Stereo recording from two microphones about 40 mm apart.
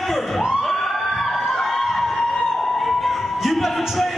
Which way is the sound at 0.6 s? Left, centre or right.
Centre.